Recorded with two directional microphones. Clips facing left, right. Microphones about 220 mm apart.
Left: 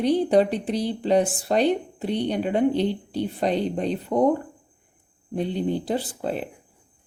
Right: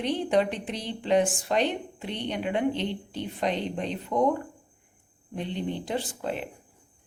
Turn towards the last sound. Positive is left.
turn(degrees=35)  # may be behind; listen again after turning